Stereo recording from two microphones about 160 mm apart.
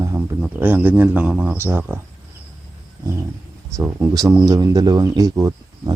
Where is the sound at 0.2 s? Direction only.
10° right (ahead or behind).